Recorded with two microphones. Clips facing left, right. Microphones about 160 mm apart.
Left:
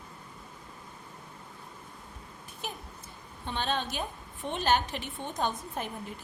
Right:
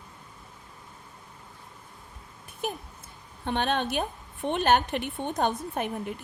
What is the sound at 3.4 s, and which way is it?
A woman's voice, 60° right (ahead or behind).